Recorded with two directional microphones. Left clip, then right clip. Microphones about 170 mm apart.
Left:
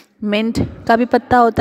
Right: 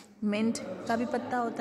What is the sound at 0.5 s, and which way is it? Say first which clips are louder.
Speech: left 17 dB; 55° left (ahead or behind).